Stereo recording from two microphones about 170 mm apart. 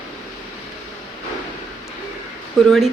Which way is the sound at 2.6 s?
Centre (ahead or behind).